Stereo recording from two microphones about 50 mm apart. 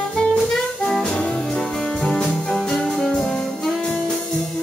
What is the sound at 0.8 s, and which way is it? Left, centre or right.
Music, centre.